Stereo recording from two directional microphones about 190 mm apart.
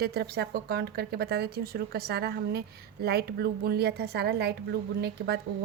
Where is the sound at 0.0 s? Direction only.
55° right (ahead or behind).